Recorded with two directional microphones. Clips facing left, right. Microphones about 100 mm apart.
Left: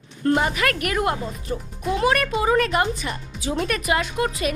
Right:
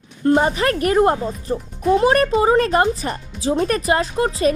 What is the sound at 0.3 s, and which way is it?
Speech, 30° right (ahead or behind).